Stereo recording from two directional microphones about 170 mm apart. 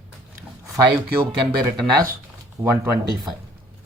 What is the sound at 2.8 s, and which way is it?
Speech, 20° right (ahead or behind).